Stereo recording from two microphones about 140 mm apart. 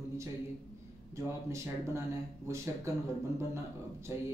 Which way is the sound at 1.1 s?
20° right (ahead or behind).